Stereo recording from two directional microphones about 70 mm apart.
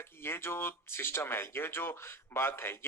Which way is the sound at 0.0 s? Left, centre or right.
Left.